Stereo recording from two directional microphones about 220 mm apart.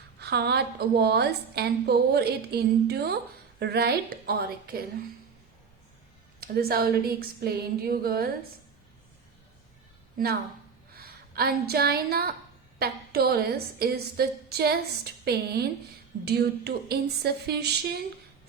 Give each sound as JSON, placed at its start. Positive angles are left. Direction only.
{"t": 0.2, "sound": "a woman's voice", "side_deg": -50}
{"t": 6.4, "sound": "a woman's voice", "side_deg": -45}
{"t": 10.9, "sound": "a woman's voice", "side_deg": -45}